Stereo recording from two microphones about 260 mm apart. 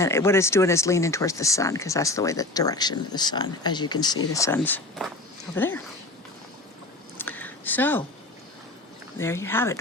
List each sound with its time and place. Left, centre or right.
0.0 s speech: centre
7.2 s a sound: centre
9.1 s speech: centre